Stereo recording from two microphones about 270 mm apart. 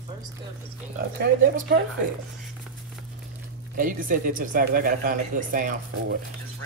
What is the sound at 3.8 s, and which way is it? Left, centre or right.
Speech, right.